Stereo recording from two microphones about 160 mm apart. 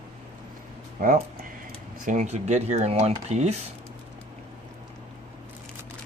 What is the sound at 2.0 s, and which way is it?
Speech, 45° right (ahead or behind).